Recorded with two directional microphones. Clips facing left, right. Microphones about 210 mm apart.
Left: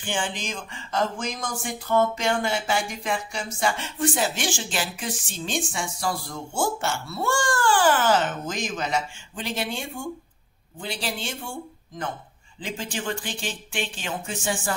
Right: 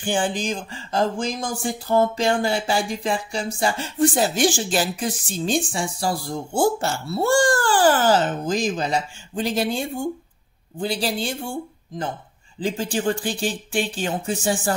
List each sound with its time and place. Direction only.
0.0 s speech: 40° right (ahead or behind)
12.5 s speech: 35° right (ahead or behind)